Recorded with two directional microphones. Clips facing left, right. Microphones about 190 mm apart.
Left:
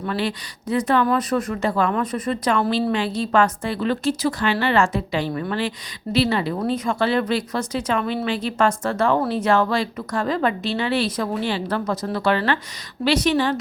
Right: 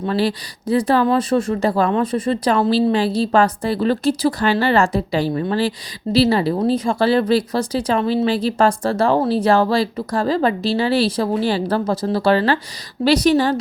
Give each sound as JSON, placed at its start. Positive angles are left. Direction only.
{"t": 0.0, "sound": "speech", "side_deg": -30}